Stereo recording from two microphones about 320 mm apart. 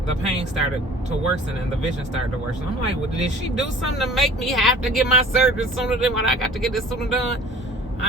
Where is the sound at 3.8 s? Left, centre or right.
Centre.